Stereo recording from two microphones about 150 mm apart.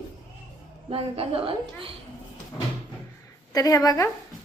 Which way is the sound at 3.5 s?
25° left (ahead or behind).